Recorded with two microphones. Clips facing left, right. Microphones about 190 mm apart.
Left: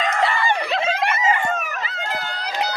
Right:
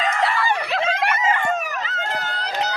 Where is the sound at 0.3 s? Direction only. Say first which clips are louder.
Even; centre (ahead or behind).